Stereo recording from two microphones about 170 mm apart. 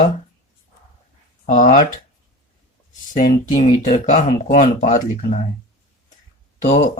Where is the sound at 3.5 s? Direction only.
50° left (ahead or behind).